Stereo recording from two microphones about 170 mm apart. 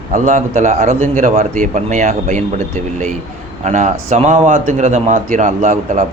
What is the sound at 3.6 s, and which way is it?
A man's voice, 45° right (ahead or behind).